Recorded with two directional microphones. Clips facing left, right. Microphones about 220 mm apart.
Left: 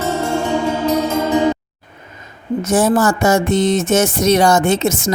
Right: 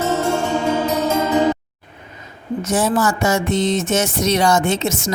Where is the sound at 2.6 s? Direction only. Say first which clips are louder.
Left 4 dB; 50° left (ahead or behind).